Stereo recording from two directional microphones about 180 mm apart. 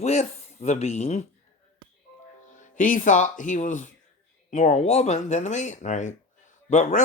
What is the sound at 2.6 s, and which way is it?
Speech, 45° left (ahead or behind).